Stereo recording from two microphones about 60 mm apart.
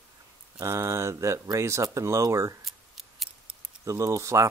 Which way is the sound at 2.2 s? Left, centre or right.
Right.